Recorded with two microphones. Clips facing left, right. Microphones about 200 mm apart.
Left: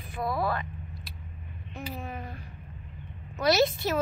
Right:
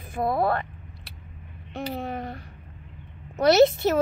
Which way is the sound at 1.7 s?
75° right (ahead or behind).